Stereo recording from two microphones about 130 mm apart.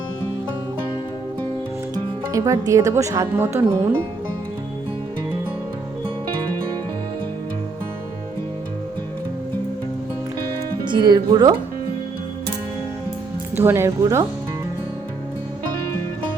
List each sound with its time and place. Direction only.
2.3 s speech: 25° right (ahead or behind)
10.8 s speech: 35° right (ahead or behind)
13.7 s speech: 20° right (ahead or behind)